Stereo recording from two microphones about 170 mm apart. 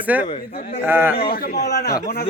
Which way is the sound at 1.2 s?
65° left (ahead or behind).